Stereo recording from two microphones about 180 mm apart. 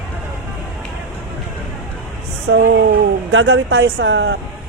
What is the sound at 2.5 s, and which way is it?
Speech, 90° right.